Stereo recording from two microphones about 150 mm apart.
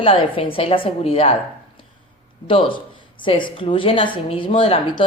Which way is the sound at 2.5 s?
35° left (ahead or behind).